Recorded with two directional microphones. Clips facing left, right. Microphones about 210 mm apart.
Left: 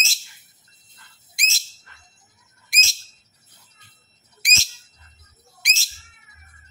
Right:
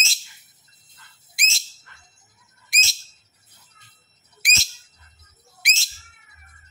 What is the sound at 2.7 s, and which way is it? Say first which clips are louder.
Bird: even; centre (ahead or behind).